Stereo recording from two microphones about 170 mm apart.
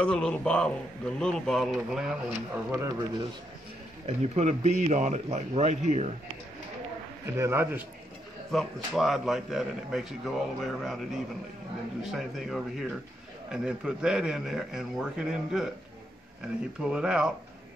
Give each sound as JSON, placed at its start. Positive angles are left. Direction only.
{"t": 0.0, "sound": "a man's voice", "side_deg": 5}
{"t": 2.5, "sound": "a man's voice", "side_deg": -15}
{"t": 4.0, "sound": "a man's voice", "side_deg": -40}
{"t": 7.2, "sound": "a man's voice", "side_deg": -15}
{"t": 8.5, "sound": "a man's voice", "side_deg": 0}
{"t": 12.0, "sound": "a man's voice", "side_deg": 0}
{"t": 16.8, "sound": "a man's voice", "side_deg": -5}